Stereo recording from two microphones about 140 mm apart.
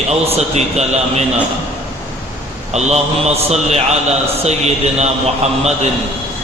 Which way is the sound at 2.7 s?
50° right (ahead or behind).